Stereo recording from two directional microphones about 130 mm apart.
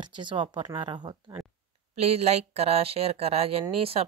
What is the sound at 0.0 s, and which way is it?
A woman's voice, 35° right (ahead or behind).